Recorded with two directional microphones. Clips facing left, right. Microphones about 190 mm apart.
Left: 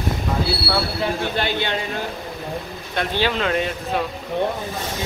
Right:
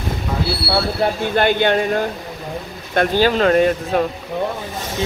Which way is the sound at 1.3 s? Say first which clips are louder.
Right 8 dB; 50° right (ahead or behind).